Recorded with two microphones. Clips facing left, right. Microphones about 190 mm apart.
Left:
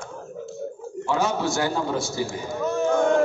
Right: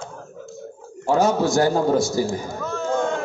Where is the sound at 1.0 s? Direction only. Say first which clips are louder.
Right 6 dB; 40° right (ahead or behind).